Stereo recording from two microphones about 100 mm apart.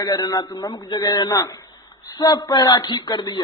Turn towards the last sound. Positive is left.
turn(degrees=45)  # may be behind; listen again after turning